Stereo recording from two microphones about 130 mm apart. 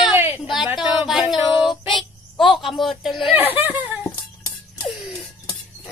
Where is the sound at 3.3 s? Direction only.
15° right (ahead or behind).